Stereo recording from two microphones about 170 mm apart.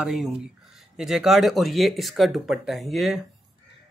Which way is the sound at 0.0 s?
Centre (ahead or behind).